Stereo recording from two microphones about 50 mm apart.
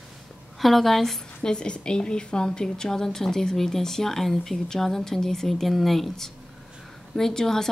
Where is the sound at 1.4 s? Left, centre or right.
Centre.